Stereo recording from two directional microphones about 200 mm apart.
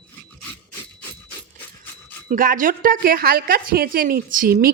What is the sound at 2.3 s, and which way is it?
A woman's voice, 45° right (ahead or behind).